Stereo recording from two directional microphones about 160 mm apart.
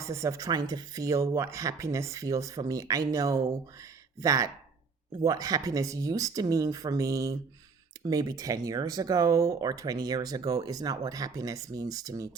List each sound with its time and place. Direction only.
0.0 s speech: 20° right (ahead or behind)